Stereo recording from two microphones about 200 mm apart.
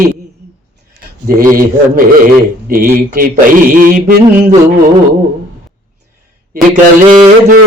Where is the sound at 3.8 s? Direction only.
45° right (ahead or behind).